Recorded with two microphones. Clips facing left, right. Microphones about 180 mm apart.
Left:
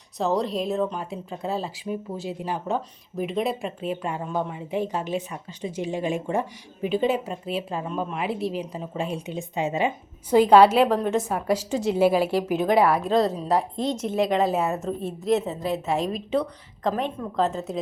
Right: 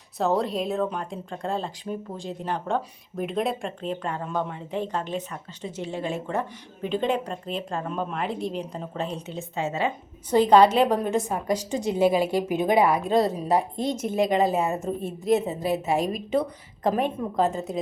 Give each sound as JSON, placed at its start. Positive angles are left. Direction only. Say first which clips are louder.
{"t": 0.2, "sound": "a woman's voice", "louder": "even", "side_deg": 0}
{"t": 17.2, "sound": "a woman's voice", "louder": "right 3 dB", "side_deg": -20}